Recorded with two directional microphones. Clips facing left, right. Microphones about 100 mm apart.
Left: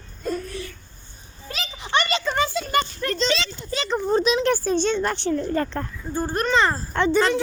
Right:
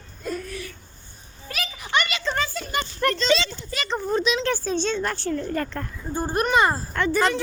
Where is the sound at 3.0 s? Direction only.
60° right (ahead or behind).